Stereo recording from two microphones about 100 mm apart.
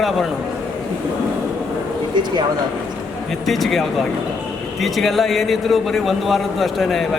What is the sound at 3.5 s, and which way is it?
A man's voice, centre (ahead or behind).